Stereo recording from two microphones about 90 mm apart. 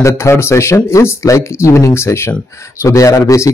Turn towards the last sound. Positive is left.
turn(degrees=35)  # may be behind; listen again after turning